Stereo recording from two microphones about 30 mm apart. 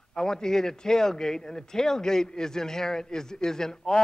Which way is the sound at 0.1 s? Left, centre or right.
Centre.